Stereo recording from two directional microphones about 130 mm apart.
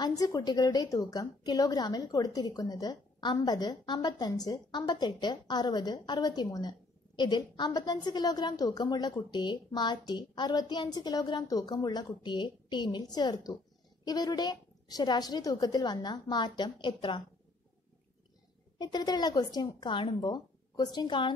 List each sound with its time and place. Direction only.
0.0 s a woman's voice: 30° left (ahead or behind)
18.8 s a woman's voice: 35° left (ahead or behind)